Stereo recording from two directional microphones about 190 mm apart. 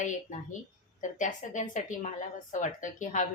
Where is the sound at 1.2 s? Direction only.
40° left (ahead or behind).